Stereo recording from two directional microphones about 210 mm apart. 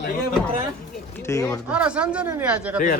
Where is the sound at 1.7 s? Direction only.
5° right (ahead or behind).